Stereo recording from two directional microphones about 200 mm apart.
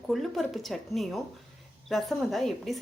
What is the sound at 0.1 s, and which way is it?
Speech, centre (ahead or behind).